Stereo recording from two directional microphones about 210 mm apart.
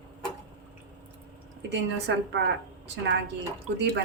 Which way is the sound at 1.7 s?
55° right (ahead or behind).